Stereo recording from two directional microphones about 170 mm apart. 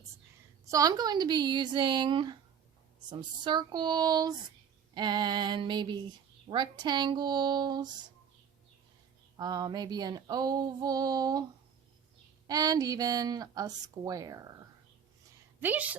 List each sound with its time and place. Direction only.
0.7 s speech: 20° right (ahead or behind)
9.4 s speech: 25° right (ahead or behind)
12.5 s speech: 20° right (ahead or behind)
15.6 s a woman's voice: 10° right (ahead or behind)